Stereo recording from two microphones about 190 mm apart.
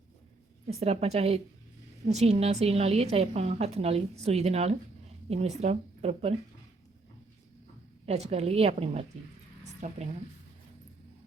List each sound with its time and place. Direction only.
0.8 s a woman's voice: 35° right (ahead or behind)
8.0 s a woman's voice: 35° right (ahead or behind)